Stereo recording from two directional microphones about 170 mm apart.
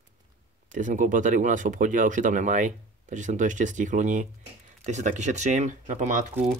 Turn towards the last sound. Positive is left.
turn(degrees=-50)  # may be behind; listen again after turning